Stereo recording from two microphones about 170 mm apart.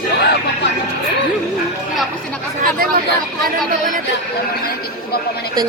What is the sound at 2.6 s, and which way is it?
Chatter, 60° right (ahead or behind).